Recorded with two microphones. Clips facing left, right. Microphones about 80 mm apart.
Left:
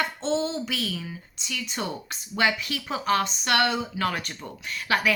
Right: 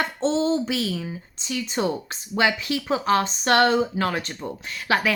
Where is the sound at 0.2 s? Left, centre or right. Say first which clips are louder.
Right 5 dB; right.